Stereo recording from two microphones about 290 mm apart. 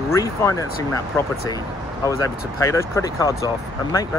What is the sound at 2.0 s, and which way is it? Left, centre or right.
Speech, centre.